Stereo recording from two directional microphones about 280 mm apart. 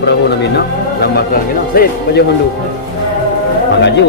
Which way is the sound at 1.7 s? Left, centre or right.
Left.